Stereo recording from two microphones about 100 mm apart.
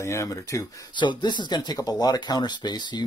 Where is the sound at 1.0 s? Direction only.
50° left (ahead or behind).